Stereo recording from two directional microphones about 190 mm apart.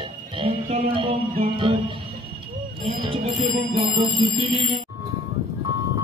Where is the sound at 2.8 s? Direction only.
30° right (ahead or behind).